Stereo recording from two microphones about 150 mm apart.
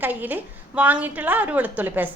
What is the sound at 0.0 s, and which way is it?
A woman's voice, 10° right (ahead or behind).